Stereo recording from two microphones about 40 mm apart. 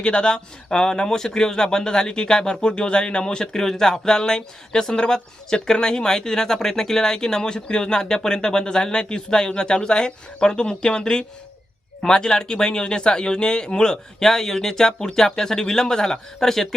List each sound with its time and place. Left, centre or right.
0.0 s speech: left
14.2 s speech: centre